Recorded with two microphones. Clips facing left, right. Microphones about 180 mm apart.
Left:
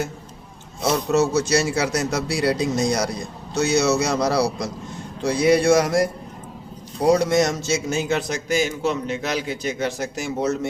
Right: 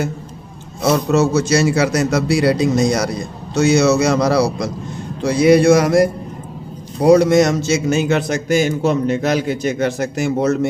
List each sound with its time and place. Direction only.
0.8 s a man's voice: 80° right
3.5 s a man's voice: 90° right
7.0 s a man's voice: 90° right; by 10.7 s 60° right (ahead or behind)